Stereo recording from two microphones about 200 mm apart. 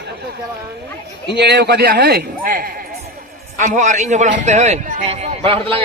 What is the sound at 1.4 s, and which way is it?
A man's voice, 55° right (ahead or behind).